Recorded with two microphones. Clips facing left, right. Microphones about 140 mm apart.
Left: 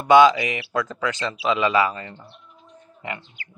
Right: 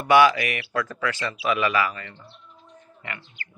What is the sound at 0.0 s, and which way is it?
Speech, 20° left (ahead or behind).